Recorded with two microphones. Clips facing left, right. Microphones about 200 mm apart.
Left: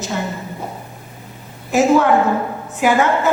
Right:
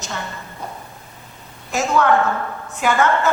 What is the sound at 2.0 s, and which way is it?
A woman's voice, 20° left (ahead or behind).